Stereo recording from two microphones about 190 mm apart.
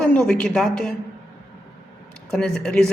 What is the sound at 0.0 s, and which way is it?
Speech, 5° left (ahead or behind).